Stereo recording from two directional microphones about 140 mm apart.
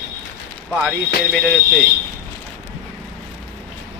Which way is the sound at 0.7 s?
5° right (ahead or behind).